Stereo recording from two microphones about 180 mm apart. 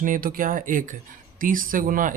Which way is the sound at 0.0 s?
50° right (ahead or behind).